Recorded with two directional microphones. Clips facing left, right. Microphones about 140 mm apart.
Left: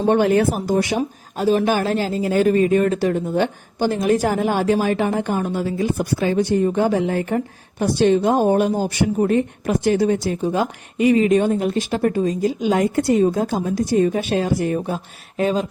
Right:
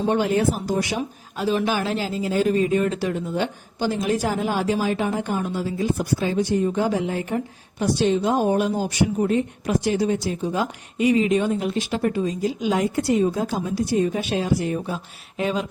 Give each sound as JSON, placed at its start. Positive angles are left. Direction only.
{"t": 0.1, "sound": "speech", "side_deg": 60}
{"t": 0.9, "sound": "speech", "side_deg": 45}